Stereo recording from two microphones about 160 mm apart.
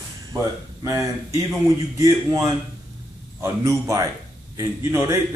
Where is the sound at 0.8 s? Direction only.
20° right (ahead or behind).